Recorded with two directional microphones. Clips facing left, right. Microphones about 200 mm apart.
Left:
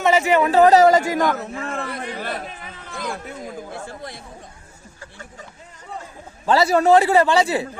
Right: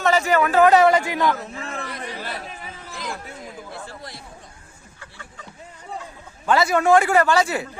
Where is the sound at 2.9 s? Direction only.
50° left (ahead or behind).